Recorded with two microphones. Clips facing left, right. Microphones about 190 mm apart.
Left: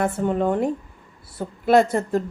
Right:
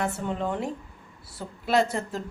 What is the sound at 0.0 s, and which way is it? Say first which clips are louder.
A woman's voice: left 7 dB; 50° left (ahead or behind).